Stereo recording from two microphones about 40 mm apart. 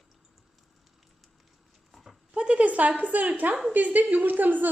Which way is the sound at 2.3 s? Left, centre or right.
Right.